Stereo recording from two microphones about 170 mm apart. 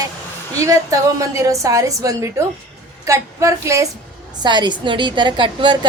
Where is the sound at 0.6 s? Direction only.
20° right (ahead or behind).